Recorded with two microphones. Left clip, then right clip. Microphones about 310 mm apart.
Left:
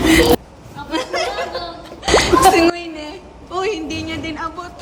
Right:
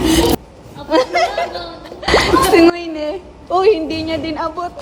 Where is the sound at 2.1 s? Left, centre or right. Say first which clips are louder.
Even; centre.